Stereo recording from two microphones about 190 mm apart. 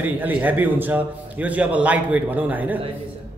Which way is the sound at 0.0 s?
10° right (ahead or behind).